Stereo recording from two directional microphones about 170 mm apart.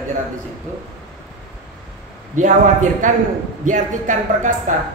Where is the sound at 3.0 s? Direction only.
45° right (ahead or behind).